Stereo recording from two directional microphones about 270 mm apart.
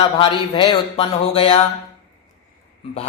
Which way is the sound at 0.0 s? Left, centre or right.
Centre.